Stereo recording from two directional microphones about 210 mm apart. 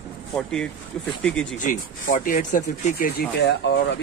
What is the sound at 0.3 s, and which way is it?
Speech, 5° left (ahead or behind).